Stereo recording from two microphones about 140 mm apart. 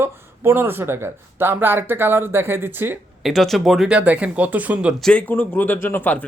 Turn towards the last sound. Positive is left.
turn(degrees=15)  # may be behind; listen again after turning